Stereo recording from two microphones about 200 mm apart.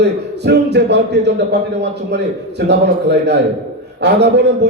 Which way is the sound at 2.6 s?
60° right (ahead or behind).